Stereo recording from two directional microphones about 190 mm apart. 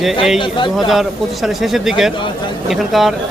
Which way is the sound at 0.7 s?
Centre (ahead or behind).